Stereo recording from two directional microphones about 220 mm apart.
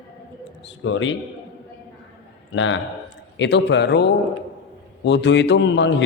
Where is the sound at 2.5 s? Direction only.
60° left (ahead or behind).